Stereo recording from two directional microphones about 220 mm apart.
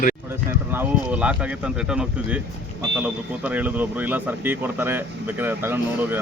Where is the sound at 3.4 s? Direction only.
5° right (ahead or behind).